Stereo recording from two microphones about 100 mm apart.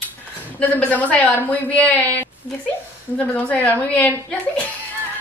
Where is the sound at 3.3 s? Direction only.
15° left (ahead or behind).